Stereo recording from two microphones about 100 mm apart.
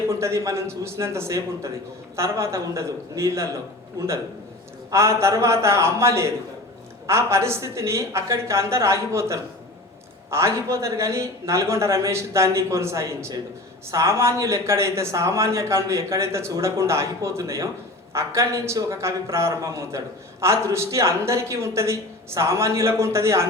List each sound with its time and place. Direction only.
0.1 s speech: 30° right (ahead or behind)
4.9 s speech: 30° right (ahead or behind)